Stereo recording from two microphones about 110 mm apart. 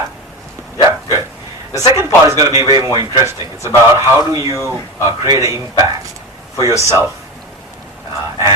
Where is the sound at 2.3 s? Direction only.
30° right (ahead or behind).